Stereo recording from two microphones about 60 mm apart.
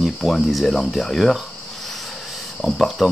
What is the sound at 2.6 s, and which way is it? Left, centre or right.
Speech, centre.